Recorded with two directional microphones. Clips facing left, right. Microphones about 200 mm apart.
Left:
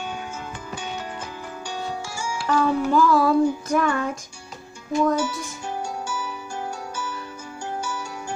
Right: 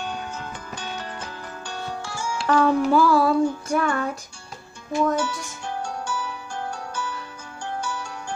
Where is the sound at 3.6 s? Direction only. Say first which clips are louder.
Left 1 dB; 35° right (ahead or behind).